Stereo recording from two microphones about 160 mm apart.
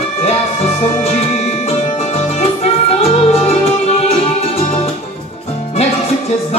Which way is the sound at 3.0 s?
40° left (ahead or behind).